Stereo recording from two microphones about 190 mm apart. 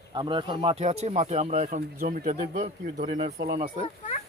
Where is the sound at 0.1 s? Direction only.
25° right (ahead or behind); by 3.1 s 40° right (ahead or behind).